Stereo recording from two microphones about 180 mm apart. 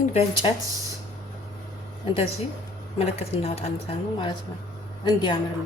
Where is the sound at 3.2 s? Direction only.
35° left (ahead or behind).